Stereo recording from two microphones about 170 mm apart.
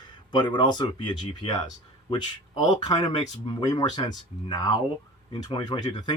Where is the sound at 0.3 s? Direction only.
25° left (ahead or behind).